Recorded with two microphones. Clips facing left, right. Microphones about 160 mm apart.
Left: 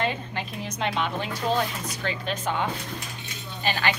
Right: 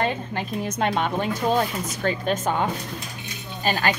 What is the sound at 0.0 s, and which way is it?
A woman's voice, 50° right (ahead or behind).